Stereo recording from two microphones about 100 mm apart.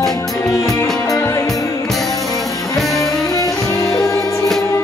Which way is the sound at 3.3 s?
35° left (ahead or behind).